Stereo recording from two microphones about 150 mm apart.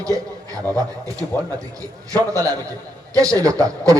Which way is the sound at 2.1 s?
20° right (ahead or behind).